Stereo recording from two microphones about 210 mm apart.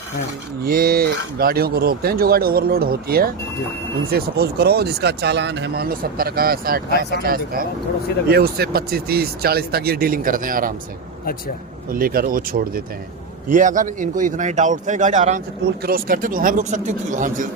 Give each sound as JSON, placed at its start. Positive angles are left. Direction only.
{"t": 0.6, "sound": "speech", "side_deg": -45}
{"t": 11.9, "sound": "speech", "side_deg": -45}